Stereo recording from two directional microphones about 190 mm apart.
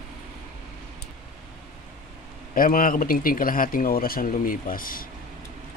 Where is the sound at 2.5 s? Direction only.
45° left (ahead or behind).